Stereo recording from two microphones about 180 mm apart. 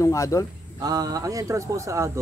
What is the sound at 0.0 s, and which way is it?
Speech, 15° left (ahead or behind).